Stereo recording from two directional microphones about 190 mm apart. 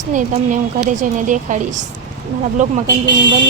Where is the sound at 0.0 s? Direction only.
40° right (ahead or behind).